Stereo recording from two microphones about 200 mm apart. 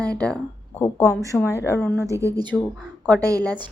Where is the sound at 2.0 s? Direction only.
15° right (ahead or behind).